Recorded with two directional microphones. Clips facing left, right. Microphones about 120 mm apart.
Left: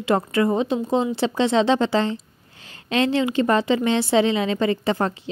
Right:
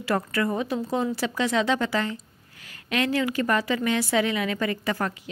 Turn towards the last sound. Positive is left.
turn(degrees=25)  # may be behind; listen again after turning